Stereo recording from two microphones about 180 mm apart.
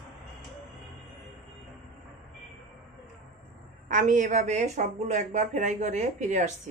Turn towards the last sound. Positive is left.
turn(degrees=-40)  # may be behind; listen again after turning